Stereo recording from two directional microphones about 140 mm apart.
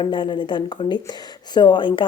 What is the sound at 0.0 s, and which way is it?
A woman's voice, 35° left (ahead or behind).